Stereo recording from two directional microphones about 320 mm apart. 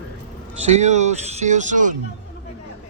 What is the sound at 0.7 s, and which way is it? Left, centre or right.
Speech, right.